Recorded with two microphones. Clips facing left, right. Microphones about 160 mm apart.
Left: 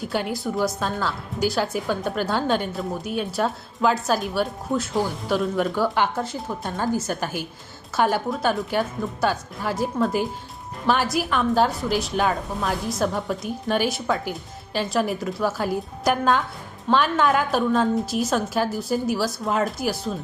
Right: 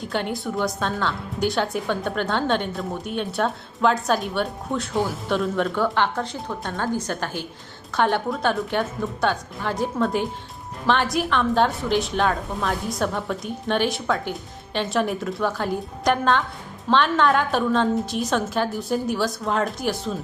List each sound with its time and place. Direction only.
0.0 s a woman's voice: 5° left (ahead or behind)